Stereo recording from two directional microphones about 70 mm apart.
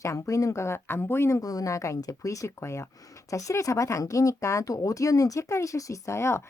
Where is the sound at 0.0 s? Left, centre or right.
Left.